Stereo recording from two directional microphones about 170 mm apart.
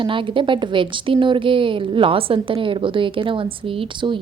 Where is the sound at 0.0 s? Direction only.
30° right (ahead or behind).